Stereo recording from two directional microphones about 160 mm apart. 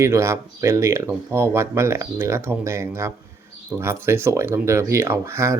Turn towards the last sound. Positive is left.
turn(degrees=-15)  # may be behind; listen again after turning